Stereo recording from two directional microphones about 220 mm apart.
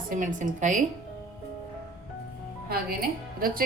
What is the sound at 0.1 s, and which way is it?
Speech, 35° right (ahead or behind).